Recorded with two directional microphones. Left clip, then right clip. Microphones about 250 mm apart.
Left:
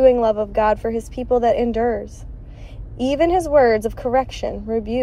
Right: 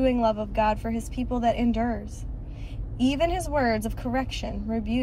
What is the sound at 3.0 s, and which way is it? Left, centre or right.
Speech, centre.